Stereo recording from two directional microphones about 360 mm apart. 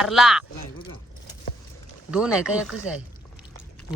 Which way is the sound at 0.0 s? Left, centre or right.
Centre.